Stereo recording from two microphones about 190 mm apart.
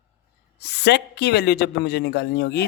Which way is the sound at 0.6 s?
60° left (ahead or behind).